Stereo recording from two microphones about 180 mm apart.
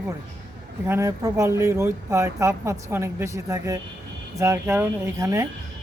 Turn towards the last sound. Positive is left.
turn(degrees=-15)  # may be behind; listen again after turning